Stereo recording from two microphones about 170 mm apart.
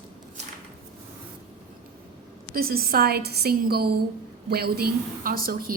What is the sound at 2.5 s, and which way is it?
A woman's voice, 65° right (ahead or behind).